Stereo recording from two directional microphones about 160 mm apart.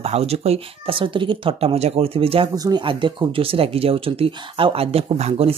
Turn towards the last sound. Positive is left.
turn(degrees=-40)  # may be behind; listen again after turning